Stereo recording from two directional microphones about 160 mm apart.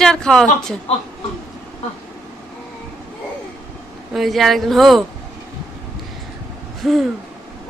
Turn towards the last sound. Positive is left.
turn(degrees=0)  # may be behind; listen again after turning